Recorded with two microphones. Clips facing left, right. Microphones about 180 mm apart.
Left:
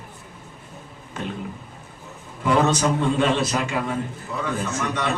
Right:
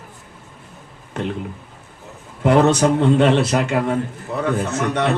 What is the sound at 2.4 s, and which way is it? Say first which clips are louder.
A man's voice: right 5 dB; 65° right (ahead or behind).